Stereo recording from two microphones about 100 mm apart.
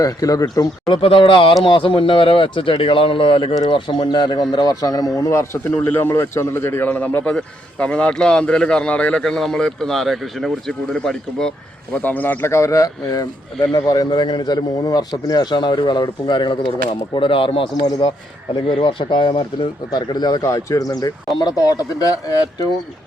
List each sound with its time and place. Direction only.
0.0 s speech: 40° left (ahead or behind)
1.0 s speech: 60° left (ahead or behind); by 11.5 s 5° left (ahead or behind)
12.0 s speech: 15° left (ahead or behind); by 16.6 s 50° left (ahead or behind)
17.2 s speech: 60° left (ahead or behind)
18.7 s speech: 55° left (ahead or behind); by 22.6 s 40° left (ahead or behind)